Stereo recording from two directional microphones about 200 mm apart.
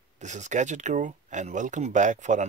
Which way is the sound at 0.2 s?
35° right (ahead or behind).